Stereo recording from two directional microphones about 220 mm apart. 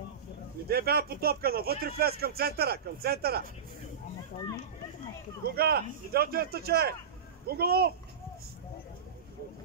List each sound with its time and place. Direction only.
0.7 s speech: 45° right (ahead or behind)
5.5 s speech: 45° right (ahead or behind)